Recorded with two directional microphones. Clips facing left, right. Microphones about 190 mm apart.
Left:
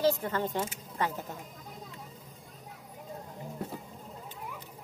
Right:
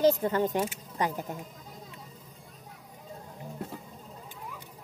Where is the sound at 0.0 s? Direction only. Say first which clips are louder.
Right 4 dB; 20° right (ahead or behind).